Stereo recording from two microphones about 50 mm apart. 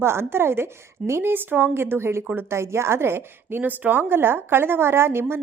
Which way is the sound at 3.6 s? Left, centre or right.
Right.